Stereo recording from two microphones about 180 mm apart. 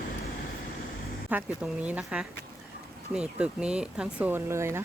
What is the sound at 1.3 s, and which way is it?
Speech, 10° right (ahead or behind).